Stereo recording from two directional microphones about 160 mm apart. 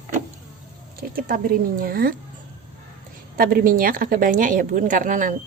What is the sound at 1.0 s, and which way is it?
Speech, 65° right (ahead or behind).